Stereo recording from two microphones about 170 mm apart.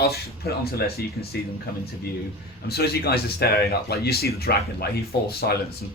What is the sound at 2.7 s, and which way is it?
Speech, 70° left (ahead or behind).